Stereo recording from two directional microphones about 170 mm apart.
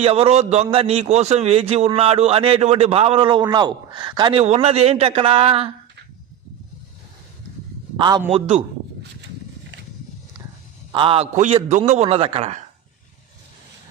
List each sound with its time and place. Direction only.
0.0 s a man's voice: 35° right (ahead or behind)
7.9 s a man's voice: 25° right (ahead or behind)
10.9 s a man's voice: 30° right (ahead or behind)